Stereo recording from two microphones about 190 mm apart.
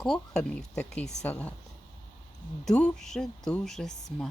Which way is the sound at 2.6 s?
5° left (ahead or behind).